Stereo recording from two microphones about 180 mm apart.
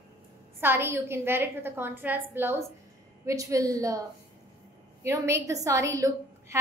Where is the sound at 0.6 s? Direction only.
10° right (ahead or behind).